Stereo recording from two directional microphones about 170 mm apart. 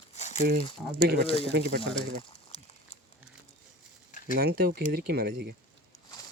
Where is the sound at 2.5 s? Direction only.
35° left (ahead or behind).